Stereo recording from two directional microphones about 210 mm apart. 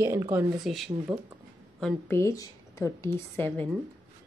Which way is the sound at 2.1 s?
15° left (ahead or behind).